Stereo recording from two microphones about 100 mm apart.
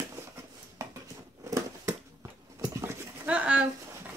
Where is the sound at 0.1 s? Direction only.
30° right (ahead or behind).